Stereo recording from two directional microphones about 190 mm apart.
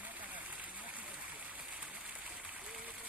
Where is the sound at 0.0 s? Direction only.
10° right (ahead or behind).